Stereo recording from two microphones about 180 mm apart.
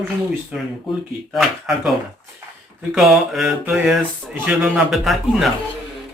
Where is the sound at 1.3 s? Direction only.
Centre (ahead or behind).